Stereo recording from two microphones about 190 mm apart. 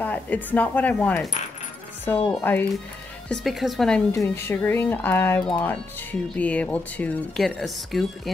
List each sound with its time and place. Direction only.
0.0 s speech: 10° left (ahead or behind)
3.3 s speech: centre (ahead or behind)